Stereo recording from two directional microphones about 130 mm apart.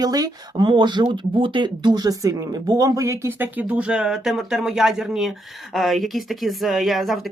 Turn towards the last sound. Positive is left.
turn(degrees=0)  # may be behind; listen again after turning